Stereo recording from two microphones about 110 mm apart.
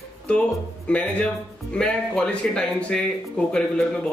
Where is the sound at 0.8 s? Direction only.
10° left (ahead or behind).